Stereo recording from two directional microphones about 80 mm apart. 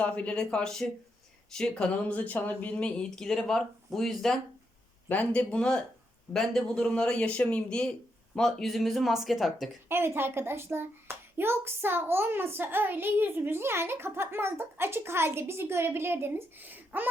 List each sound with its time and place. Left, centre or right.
0.0 s speech: centre
5.0 s speech: centre
9.9 s a woman's voice: right